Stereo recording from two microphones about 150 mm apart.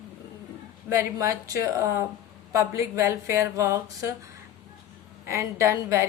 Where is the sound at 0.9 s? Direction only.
20° right (ahead or behind).